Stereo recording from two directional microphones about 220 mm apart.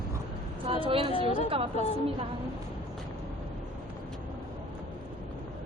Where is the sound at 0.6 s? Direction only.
25° right (ahead or behind).